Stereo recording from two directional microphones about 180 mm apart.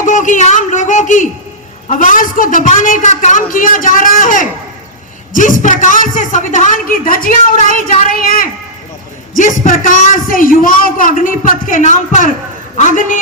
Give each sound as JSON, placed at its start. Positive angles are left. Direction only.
{"t": 0.0, "sound": "a man's voice", "side_deg": 45}